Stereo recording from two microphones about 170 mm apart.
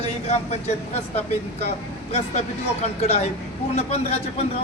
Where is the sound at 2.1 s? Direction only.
40° left (ahead or behind).